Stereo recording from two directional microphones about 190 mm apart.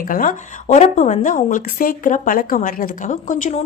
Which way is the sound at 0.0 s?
45° left (ahead or behind).